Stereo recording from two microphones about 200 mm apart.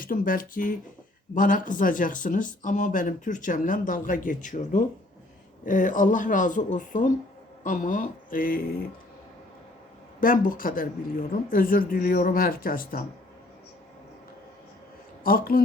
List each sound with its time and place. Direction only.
0.0 s speech: 45° left (ahead or behind)
10.2 s speech: 40° left (ahead or behind)
15.2 s speech: 45° left (ahead or behind)